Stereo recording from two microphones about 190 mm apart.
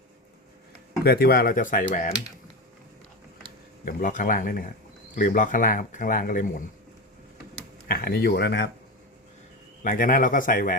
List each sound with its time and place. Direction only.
1.0 s speech: 55° left (ahead or behind)
3.8 s speech: 45° left (ahead or behind)
7.9 s speech: 50° left (ahead or behind)
9.8 s speech: 45° left (ahead or behind)